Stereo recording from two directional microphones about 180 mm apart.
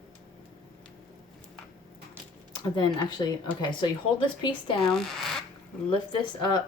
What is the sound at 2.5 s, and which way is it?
Speech, 25° left (ahead or behind).